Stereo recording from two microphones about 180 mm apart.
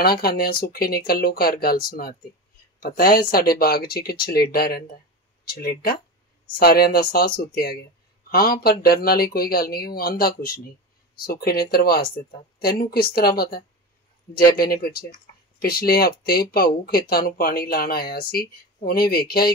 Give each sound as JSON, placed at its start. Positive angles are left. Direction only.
{"t": 0.2, "sound": "speech", "side_deg": 60}